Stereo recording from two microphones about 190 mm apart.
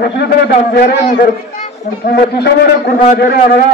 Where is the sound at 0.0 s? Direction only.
55° left (ahead or behind).